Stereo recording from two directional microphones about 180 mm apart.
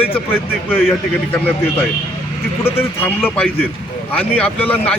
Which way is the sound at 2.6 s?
15° left (ahead or behind).